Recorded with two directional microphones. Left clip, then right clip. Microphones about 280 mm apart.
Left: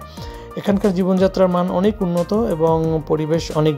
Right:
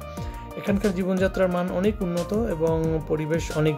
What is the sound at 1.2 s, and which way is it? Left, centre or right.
Speech, centre.